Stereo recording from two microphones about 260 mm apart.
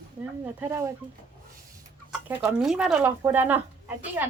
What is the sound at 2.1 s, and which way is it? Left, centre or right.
Speech, centre.